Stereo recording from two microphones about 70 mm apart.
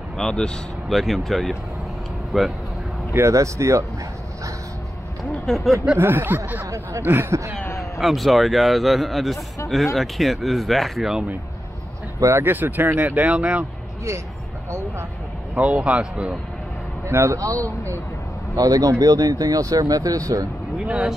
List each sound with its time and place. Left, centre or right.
0.2 s a man's voice: centre
3.1 s speech: right
5.5 s a man's voice: centre
5.9 s speech: right
8.0 s a man's voice: centre
12.2 s speech: right
12.4 s speech: right
15.5 s speech: centre
17.1 s speech: right
17.4 s speech: right
18.6 s speech: right
20.8 s speech: centre